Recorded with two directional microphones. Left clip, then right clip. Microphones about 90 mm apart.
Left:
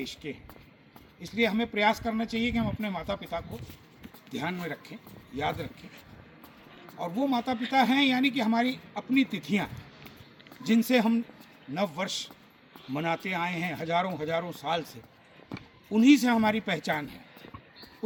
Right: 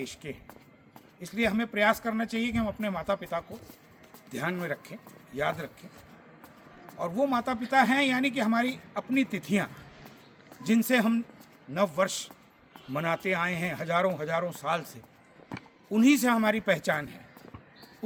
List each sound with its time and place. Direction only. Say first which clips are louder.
0.0 s a man's voice: left 1 dB; 30° right (ahead or behind)
7.0 s speech: right 2 dB; 30° right (ahead or behind)
8.4 s a man's voice: even; 40° right (ahead or behind)
13.3 s a man's voice: right 2 dB; 35° right (ahead or behind)